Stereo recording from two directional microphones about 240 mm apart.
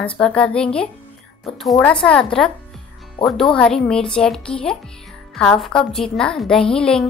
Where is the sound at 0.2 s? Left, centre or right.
Centre.